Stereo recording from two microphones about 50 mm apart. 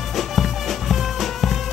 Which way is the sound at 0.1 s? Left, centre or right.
Centre.